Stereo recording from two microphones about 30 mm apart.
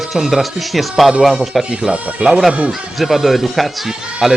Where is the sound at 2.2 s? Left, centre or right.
Right.